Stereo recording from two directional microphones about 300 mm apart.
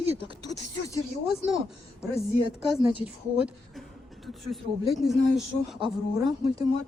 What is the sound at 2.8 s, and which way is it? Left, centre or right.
Speech, centre.